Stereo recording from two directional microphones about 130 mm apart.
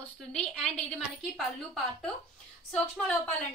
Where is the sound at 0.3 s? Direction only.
5° left (ahead or behind).